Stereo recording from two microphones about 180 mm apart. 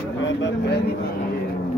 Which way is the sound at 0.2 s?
80° left.